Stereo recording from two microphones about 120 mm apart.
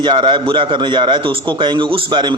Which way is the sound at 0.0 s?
40° right (ahead or behind).